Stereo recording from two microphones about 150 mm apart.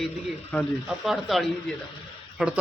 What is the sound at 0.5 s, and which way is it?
Speech, 10° left (ahead or behind).